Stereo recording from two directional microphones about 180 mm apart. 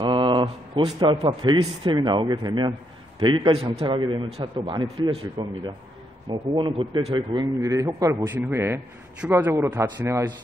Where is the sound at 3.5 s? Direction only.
35° right (ahead or behind).